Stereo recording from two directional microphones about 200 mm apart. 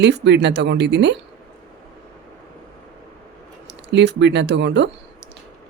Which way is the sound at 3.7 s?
60° right (ahead or behind).